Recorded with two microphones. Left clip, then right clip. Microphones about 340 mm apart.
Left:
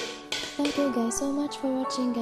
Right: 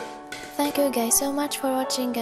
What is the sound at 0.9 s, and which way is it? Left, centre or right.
Music, right.